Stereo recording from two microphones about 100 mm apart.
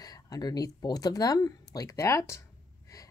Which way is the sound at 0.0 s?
40° left (ahead or behind).